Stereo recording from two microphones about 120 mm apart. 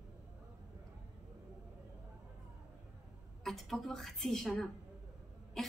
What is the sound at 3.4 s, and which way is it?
A woman's voice, centre (ahead or behind).